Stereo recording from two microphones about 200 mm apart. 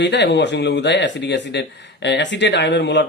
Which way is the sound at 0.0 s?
60° left (ahead or behind).